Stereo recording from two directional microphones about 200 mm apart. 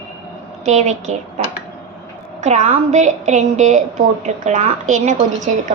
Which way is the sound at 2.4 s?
35° right (ahead or behind).